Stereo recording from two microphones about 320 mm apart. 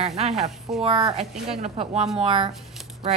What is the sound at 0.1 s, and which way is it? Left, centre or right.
A woman's voice, centre.